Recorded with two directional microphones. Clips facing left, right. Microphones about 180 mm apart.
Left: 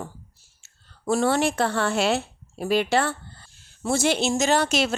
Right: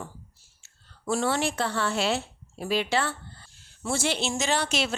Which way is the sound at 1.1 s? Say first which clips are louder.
Left 5 dB; 50° left (ahead or behind).